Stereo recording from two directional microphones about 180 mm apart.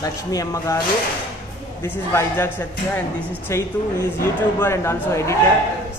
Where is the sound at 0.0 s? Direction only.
20° left (ahead or behind).